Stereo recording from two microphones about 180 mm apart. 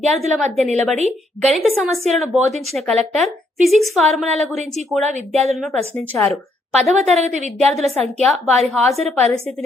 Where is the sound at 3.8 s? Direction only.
Centre (ahead or behind).